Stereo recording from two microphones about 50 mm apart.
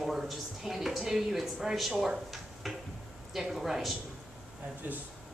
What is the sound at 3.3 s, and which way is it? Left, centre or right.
Speech, centre.